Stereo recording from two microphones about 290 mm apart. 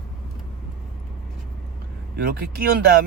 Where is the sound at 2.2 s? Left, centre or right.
Right.